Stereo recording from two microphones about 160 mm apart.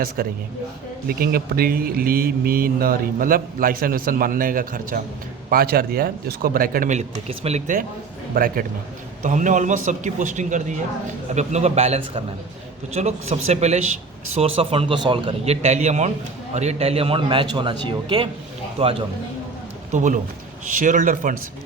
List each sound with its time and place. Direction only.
0.2 s speech: 65° right (ahead or behind)
7.3 s a man's voice: 40° right (ahead or behind)
8.4 s speech: 65° right (ahead or behind)
9.2 s a man's voice: 50° right (ahead or behind)
19.9 s a man's voice: 50° right (ahead or behind)